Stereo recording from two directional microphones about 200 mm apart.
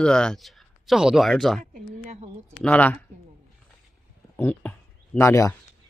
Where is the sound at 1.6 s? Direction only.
35° right (ahead or behind).